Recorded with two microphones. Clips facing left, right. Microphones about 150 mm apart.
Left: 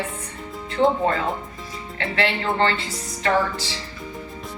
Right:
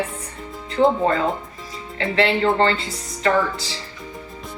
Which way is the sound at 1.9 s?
30° right (ahead or behind).